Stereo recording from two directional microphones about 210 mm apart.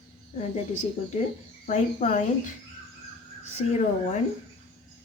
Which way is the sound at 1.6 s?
35° left (ahead or behind).